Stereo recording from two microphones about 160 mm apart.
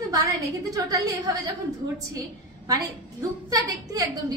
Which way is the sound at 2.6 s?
25° right (ahead or behind).